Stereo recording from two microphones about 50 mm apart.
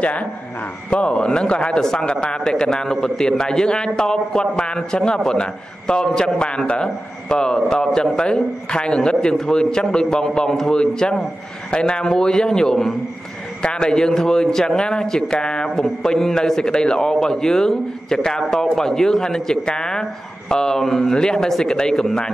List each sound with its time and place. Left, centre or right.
0.0 s speech: left; by 22.3 s centre